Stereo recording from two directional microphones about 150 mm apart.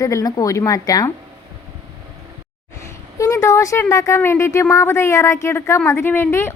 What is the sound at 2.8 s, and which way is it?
A woman's voice, 20° left (ahead or behind).